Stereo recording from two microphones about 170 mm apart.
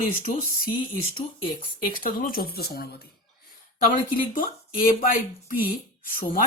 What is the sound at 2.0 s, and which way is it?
Speech, 55° left (ahead or behind).